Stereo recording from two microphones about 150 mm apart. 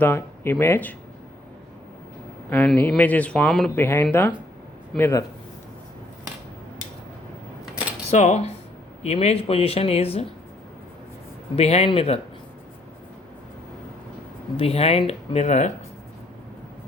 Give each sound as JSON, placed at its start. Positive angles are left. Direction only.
{"t": 0.0, "sound": "speech", "side_deg": 15}
{"t": 2.5, "sound": "speech", "side_deg": 10}
{"t": 8.1, "sound": "speech", "side_deg": 50}
{"t": 11.5, "sound": "speech", "side_deg": 45}
{"t": 14.5, "sound": "speech", "side_deg": 40}